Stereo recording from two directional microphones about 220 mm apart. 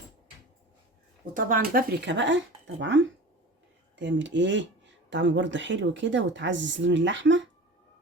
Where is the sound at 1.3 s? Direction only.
40° right (ahead or behind); by 7.5 s 55° right (ahead or behind).